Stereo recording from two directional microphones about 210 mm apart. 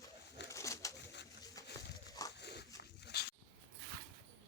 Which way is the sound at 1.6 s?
15° left (ahead or behind).